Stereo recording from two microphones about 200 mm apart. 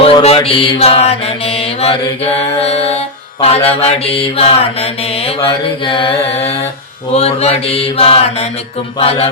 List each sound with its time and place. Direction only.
0.0 s mantra: 30° left (ahead or behind)